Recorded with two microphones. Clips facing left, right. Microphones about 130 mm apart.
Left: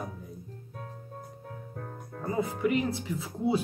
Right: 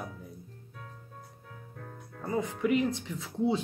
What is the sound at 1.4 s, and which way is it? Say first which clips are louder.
Music: left 5 dB; 45° left (ahead or behind).